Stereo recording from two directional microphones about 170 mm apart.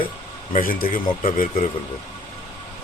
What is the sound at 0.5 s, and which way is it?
Speech, 55° left (ahead or behind).